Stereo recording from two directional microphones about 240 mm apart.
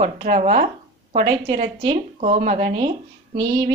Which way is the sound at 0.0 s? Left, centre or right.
Right.